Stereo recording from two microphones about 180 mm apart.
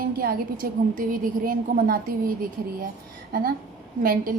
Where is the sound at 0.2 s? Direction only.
55° right (ahead or behind).